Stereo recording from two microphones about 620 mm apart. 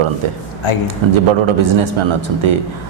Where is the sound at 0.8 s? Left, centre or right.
Right.